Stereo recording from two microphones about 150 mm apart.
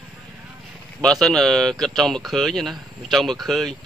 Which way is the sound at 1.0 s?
5° left (ahead or behind).